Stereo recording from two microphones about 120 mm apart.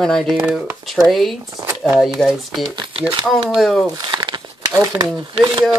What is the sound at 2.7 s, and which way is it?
Speech, 45° right (ahead or behind).